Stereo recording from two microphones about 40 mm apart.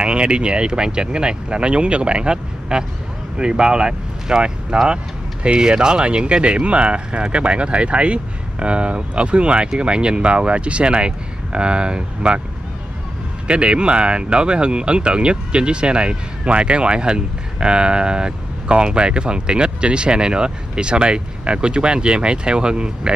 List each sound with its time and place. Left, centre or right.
0.0 s speech: right
13.5 s speech: right